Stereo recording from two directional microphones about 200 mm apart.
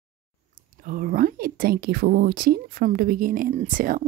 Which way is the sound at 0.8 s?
45° right (ahead or behind).